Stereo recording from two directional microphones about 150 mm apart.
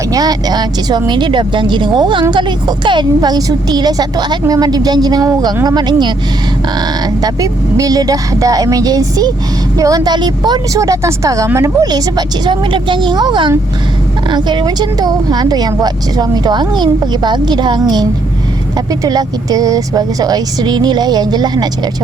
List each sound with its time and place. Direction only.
0.1 s speech: 25° right (ahead or behind)